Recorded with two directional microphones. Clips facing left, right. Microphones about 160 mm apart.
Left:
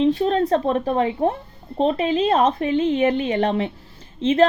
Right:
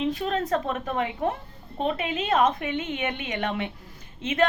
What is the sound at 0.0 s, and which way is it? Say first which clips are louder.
A woman's voice: left 8 dB; 30° left (ahead or behind).